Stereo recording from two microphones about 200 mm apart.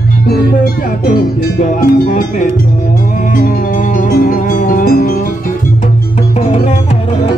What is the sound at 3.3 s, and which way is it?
Music, 45° left (ahead or behind).